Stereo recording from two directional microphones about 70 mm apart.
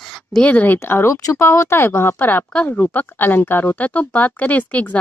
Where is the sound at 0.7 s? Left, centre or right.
Left.